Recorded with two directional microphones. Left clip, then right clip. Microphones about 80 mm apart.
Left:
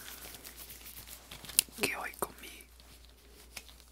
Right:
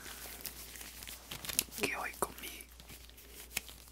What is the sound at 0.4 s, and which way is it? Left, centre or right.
Crumpling, right.